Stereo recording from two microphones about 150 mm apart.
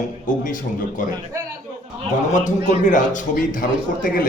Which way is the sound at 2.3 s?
55° left (ahead or behind).